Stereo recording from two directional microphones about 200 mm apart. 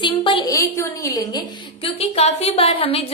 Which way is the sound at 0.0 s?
25° left (ahead or behind).